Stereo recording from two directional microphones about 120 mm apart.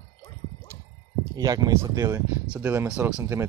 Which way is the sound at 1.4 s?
30° right (ahead or behind).